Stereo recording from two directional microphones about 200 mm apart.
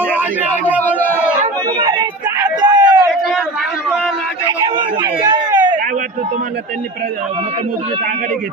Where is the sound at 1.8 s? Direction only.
20° right (ahead or behind).